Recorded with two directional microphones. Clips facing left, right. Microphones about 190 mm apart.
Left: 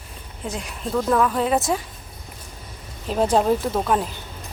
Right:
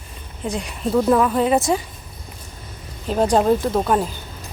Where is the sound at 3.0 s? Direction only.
5° left (ahead or behind).